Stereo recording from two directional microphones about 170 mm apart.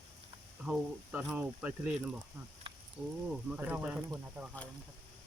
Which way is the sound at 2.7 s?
30° right (ahead or behind).